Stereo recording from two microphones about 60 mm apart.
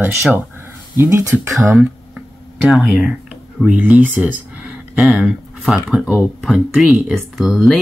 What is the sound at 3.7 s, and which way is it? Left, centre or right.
Speech, right.